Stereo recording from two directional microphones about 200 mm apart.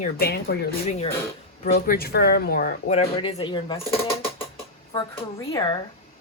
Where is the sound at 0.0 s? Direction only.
50° left (ahead or behind).